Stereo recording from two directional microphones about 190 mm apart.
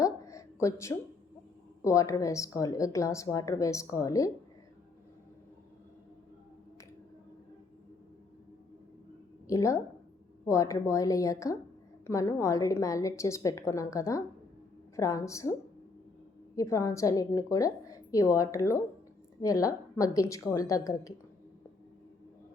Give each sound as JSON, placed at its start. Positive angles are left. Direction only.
{"t": 0.0, "sound": "a sound", "side_deg": 15}
{"t": 1.8, "sound": "speech", "side_deg": 15}
{"t": 9.5, "sound": "speech", "side_deg": 15}
{"t": 16.6, "sound": "speech", "side_deg": 15}